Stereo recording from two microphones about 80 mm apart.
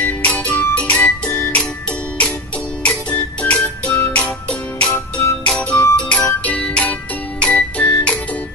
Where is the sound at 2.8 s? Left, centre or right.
Centre.